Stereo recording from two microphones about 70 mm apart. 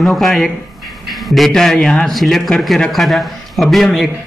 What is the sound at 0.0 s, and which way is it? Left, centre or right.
A man's voice, centre.